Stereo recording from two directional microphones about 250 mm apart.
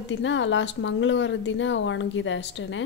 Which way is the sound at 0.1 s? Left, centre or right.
Left.